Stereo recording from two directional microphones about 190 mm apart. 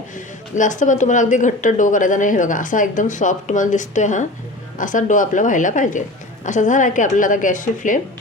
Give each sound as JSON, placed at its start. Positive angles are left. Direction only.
{"t": 0.5, "sound": "a woman's voice", "side_deg": 40}